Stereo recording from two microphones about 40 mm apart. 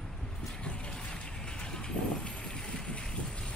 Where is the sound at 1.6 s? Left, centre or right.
Left.